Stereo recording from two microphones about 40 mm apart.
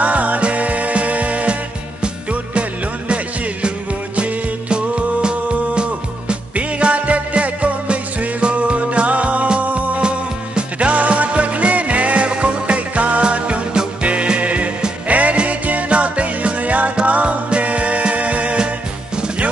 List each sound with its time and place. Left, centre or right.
0.0 s music: right
4.2 s music: right
10.0 s music: right